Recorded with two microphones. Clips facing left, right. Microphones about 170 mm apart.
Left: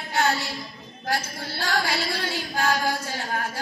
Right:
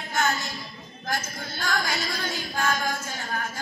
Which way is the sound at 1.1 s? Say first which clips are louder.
Left 2 dB; 35° left (ahead or behind).